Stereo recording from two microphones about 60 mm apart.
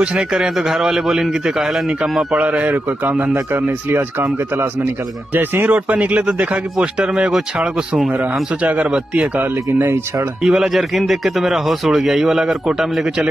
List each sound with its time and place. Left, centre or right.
0.0 s speech: centre
0.4 s a man's voice: centre
2.1 s speech: centre; by 4.0 s right
5.3 s speech: right; by 8.0 s centre
8.1 s speech: right
10.4 s a man's voice: centre